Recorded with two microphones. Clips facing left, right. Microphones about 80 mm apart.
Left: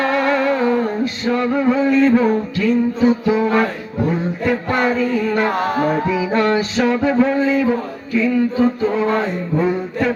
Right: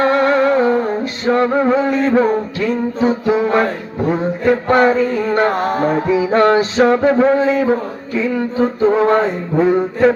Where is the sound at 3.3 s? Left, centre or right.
Right.